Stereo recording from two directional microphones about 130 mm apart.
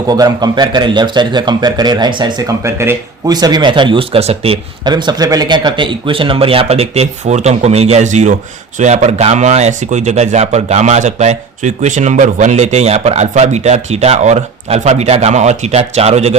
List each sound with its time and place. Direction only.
0.1 s a man's voice: 30° right (ahead or behind)
2.5 s speech: 20° right (ahead or behind)
3.3 s a man's voice: 35° right (ahead or behind); by 4.6 s 50° right (ahead or behind)
4.8 s speech: 35° right (ahead or behind); by 16.3 s 55° right (ahead or behind)